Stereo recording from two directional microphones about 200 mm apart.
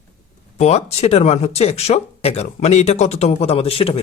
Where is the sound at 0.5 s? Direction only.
30° left (ahead or behind).